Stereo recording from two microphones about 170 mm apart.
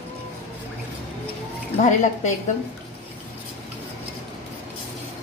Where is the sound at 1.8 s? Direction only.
45° left (ahead or behind).